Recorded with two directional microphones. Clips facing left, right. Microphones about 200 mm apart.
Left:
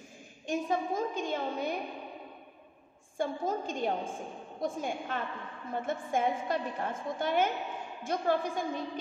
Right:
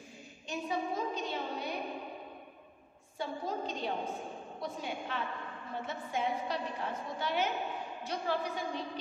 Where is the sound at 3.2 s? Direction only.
50° left (ahead or behind).